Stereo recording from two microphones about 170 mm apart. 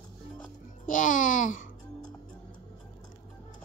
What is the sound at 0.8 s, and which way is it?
Babbling, 50° left (ahead or behind).